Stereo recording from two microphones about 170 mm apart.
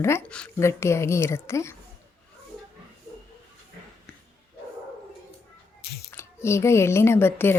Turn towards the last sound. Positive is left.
turn(degrees=15)  # may be behind; listen again after turning